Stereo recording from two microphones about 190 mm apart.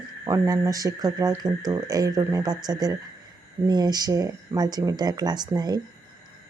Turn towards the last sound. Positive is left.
turn(degrees=-20)  # may be behind; listen again after turning